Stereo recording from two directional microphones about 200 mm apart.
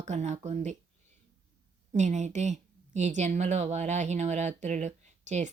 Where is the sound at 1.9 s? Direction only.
35° right (ahead or behind).